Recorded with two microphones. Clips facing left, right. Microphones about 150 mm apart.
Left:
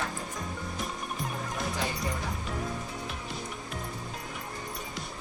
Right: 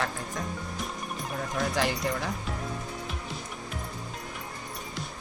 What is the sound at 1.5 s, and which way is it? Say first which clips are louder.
Music: right 6 dB; 90° right.